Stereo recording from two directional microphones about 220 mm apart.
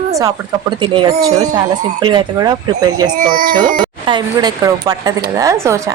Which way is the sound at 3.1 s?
40° right (ahead or behind).